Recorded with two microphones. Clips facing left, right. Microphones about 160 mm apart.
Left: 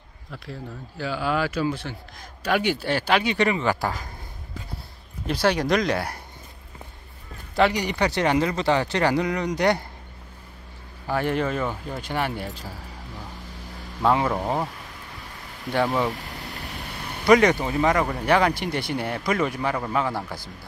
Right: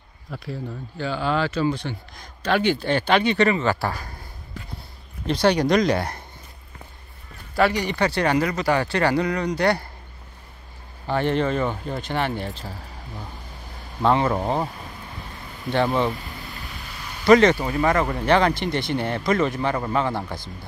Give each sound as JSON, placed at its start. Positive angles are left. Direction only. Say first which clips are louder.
{"t": 0.3, "sound": "speech", "louder": "right 4 dB", "side_deg": 0}
{"t": 5.2, "sound": "speech", "louder": "right 3 dB", "side_deg": 5}
{"t": 7.5, "sound": "speech", "louder": "even", "side_deg": 15}
{"t": 11.1, "sound": "speech", "louder": "right 2 dB", "side_deg": 5}
{"t": 14.0, "sound": "speech", "louder": "right 2 dB", "side_deg": 5}
{"t": 15.7, "sound": "speech", "louder": "right 2 dB", "side_deg": 5}
{"t": 16.2, "sound": "a sound", "louder": "left 1 dB", "side_deg": 75}
{"t": 17.2, "sound": "speech", "louder": "right 2 dB", "side_deg": 10}